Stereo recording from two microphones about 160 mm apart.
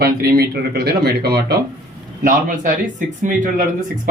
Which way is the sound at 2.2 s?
55° right (ahead or behind).